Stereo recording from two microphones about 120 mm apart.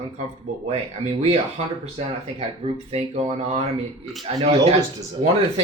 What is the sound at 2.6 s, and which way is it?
Speech, 60° right (ahead or behind).